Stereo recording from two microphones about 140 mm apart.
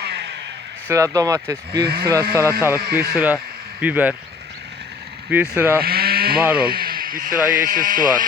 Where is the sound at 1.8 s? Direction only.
90° right.